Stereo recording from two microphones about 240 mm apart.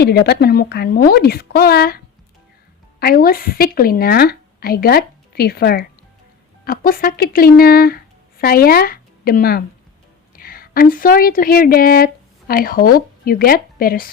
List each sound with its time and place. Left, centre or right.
0.0 s speech: left
3.0 s a woman's voice: left